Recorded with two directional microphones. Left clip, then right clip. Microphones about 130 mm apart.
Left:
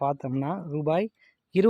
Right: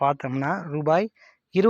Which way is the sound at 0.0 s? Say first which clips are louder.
Right 5 dB; 10° left (ahead or behind).